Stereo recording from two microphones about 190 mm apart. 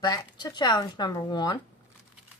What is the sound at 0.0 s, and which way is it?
Speech, 20° left (ahead or behind).